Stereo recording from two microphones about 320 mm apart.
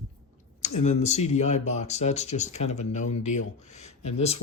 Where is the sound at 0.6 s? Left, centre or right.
Left.